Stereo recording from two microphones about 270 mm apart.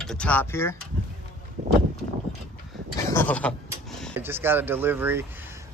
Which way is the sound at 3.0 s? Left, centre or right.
Centre.